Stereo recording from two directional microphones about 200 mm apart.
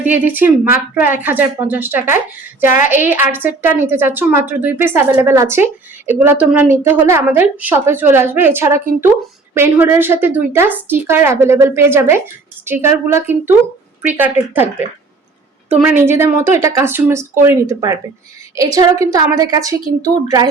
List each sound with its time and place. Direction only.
0.0 s a woman's voice: 10° right (ahead or behind)